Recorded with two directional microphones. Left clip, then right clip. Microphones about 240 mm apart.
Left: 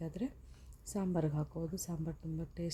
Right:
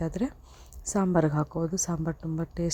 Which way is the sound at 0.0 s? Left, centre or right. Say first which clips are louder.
Right 11 dB; right.